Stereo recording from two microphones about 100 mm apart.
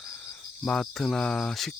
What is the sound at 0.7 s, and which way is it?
Mantra, 5° left (ahead or behind).